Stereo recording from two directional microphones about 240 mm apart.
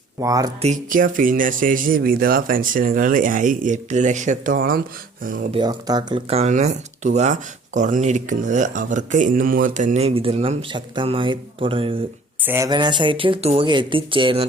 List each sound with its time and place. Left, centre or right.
0.2 s speech: centre
0.6 s speech: right
5.5 s speech: centre